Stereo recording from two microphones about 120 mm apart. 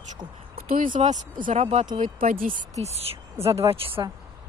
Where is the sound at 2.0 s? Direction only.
90° right; by 4.0 s 50° right (ahead or behind).